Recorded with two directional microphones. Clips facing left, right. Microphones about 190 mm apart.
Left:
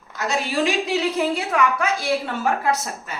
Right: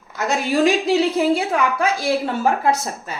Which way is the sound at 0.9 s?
30° right (ahead or behind).